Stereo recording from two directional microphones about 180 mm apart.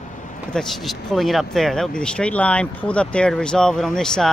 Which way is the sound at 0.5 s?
Centre (ahead or behind).